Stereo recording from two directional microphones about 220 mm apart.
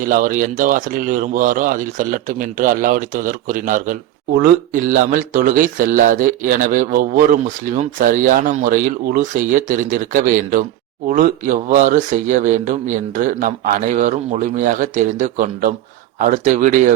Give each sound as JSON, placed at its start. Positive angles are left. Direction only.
{"t": 0.0, "sound": "speech", "side_deg": -40}